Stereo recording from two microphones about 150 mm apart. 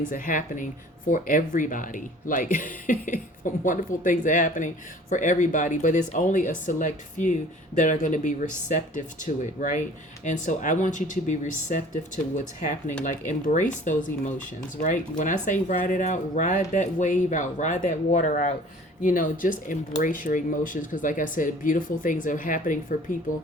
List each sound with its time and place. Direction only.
0.1 s speech: 60° left (ahead or behind)